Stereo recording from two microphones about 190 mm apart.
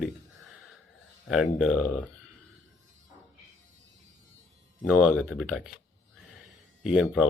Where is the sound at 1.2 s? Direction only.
Centre (ahead or behind).